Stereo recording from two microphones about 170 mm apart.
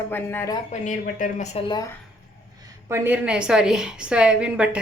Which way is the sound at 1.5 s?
25° left (ahead or behind).